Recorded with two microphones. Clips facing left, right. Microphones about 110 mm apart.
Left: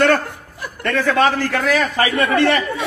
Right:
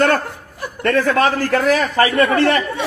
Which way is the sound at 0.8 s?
40° right (ahead or behind).